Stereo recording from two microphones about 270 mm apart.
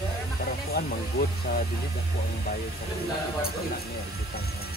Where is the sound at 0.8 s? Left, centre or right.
Left.